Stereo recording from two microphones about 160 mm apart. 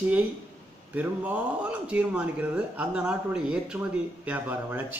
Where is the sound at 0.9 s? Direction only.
10° right (ahead or behind).